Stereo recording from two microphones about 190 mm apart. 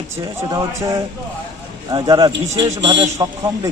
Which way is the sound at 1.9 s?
20° right (ahead or behind).